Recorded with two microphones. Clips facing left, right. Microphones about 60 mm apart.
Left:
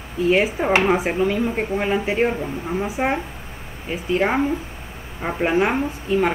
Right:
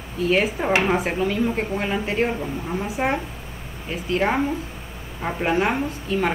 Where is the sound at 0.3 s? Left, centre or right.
Centre.